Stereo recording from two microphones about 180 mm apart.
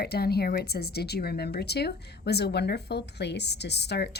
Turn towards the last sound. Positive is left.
turn(degrees=65)  # may be behind; listen again after turning